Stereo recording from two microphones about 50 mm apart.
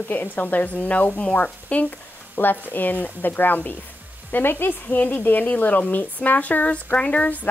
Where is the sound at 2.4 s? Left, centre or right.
Left.